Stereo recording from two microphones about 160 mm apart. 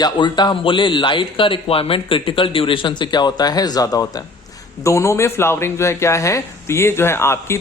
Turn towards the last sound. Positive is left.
turn(degrees=15)  # may be behind; listen again after turning